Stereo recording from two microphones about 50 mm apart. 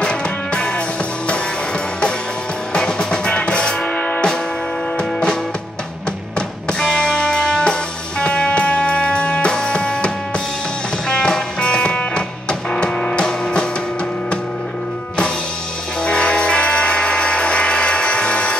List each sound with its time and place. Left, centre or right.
0.0 s music: centre
2.7 s music: centre
6.8 s music: centre
16.0 s music: centre